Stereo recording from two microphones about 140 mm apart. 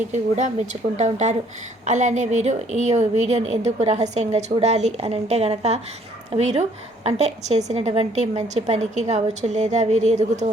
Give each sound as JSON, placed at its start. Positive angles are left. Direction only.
{"t": 0.1, "sound": "a woman's voice", "side_deg": -60}